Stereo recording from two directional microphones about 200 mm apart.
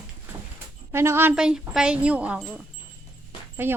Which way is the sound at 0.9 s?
10° right (ahead or behind).